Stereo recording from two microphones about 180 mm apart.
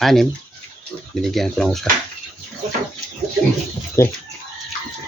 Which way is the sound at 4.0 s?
15° left (ahead or behind).